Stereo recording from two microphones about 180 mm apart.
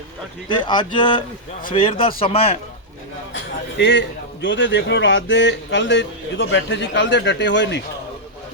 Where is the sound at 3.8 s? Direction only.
85° left.